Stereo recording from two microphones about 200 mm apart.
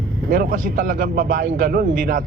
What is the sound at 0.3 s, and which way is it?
A man's voice, 40° right (ahead or behind).